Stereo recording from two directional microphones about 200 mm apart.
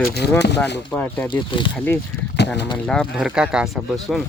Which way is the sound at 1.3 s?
25° left (ahead or behind).